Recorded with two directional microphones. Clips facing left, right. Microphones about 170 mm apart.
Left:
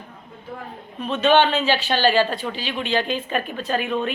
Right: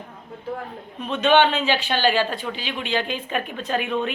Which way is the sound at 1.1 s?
15° right (ahead or behind).